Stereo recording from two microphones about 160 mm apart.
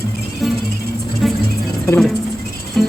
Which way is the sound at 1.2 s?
Centre (ahead or behind).